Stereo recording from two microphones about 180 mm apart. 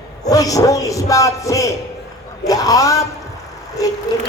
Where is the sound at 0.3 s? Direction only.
20° left (ahead or behind).